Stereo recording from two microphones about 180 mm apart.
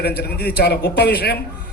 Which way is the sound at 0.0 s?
60° left (ahead or behind).